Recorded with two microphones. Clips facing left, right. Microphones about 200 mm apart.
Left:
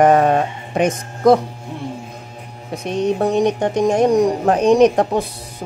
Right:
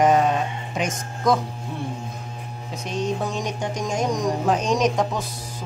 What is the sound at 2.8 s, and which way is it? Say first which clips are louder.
Speech: left 8 dB; 60° left (ahead or behind).